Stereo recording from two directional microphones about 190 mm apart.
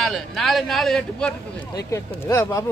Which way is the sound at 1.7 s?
15° left (ahead or behind).